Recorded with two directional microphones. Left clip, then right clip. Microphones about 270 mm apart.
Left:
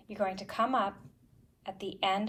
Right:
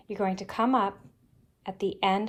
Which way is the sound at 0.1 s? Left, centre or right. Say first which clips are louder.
Right 3 dB; right.